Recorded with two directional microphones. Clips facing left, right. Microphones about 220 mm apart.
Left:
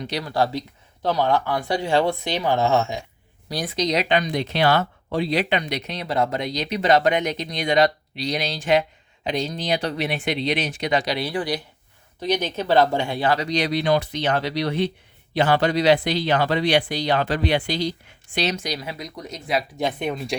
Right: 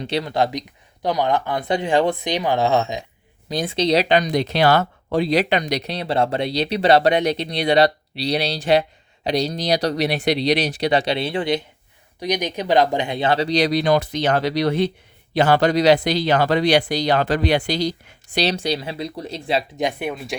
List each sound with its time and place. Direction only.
0.0 s speech: 25° right (ahead or behind)
12.2 s speech: 15° right (ahead or behind)
19.8 s speech: 5° right (ahead or behind)